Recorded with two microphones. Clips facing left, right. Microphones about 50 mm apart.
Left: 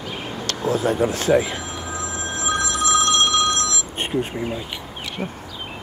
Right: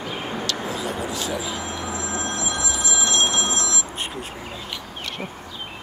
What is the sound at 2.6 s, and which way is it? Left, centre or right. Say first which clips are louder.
Telephone bell ringing: left 10 dB; left.